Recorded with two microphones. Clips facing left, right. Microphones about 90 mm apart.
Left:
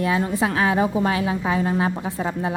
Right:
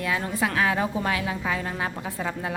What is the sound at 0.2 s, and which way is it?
A woman's voice, 25° left (ahead or behind).